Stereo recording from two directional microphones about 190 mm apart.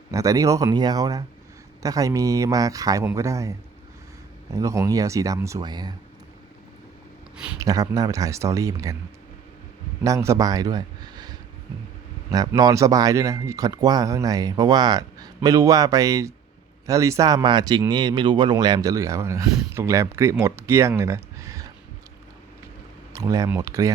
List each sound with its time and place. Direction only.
0.1 s speech: 15° right (ahead or behind)
4.5 s speech: 15° right (ahead or behind)
7.6 s speech: 20° right (ahead or behind)
10.0 s speech: 15° right (ahead or behind)
23.1 s speech: 20° right (ahead or behind)